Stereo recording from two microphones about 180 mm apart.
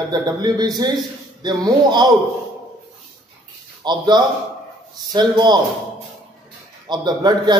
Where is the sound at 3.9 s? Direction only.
25° right (ahead or behind).